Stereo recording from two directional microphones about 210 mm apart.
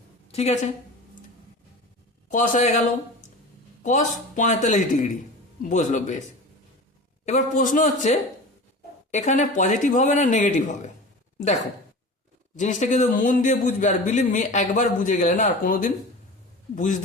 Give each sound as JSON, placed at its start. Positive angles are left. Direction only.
{"t": 0.3, "sound": "a woman's voice", "side_deg": 30}
{"t": 2.3, "sound": "speech", "side_deg": 40}
{"t": 3.8, "sound": "speech", "side_deg": 35}
{"t": 7.3, "sound": "a woman's voice", "side_deg": 35}